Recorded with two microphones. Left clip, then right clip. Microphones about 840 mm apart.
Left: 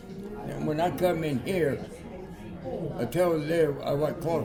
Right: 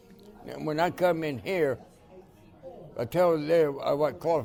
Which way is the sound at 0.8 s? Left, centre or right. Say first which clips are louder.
Right 1 dB; right.